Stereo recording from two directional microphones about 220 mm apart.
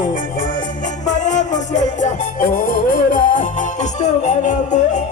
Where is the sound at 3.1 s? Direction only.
35° left (ahead or behind).